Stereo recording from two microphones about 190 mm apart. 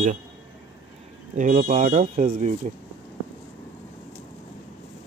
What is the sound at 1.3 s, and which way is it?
Speech, 45° right (ahead or behind).